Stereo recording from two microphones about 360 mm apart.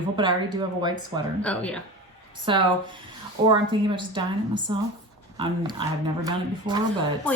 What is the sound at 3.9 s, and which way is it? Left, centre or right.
Speech, centre.